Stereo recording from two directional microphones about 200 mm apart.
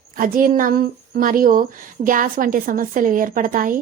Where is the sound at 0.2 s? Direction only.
45° right (ahead or behind).